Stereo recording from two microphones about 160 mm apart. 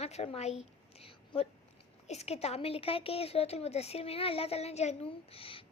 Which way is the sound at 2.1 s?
40° left (ahead or behind).